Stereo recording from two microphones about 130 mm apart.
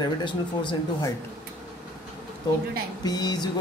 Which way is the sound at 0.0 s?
35° left (ahead or behind).